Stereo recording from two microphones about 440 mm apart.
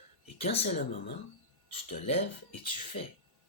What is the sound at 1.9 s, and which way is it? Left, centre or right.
Speech, centre.